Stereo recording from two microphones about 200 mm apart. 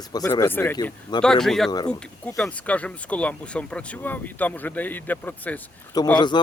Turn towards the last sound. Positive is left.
turn(degrees=10)  # may be behind; listen again after turning